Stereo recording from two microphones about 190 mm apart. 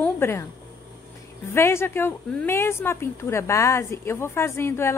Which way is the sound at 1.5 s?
15° left (ahead or behind).